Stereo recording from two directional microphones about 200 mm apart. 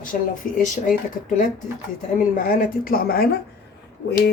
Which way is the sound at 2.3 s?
45° left (ahead or behind).